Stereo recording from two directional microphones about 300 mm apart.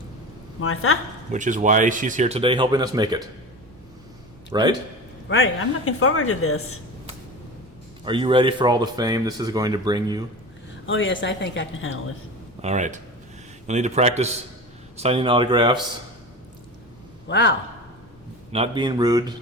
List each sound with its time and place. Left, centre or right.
0.6 s speech: left
1.3 s speech: right
4.5 s speech: centre
5.3 s speech: left
8.0 s speech: centre
10.8 s a woman's voice: left
12.6 s speech: right
17.2 s a man's voice: left
18.5 s speech: centre